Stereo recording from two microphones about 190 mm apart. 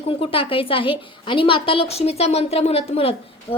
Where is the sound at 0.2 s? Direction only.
30° left (ahead or behind).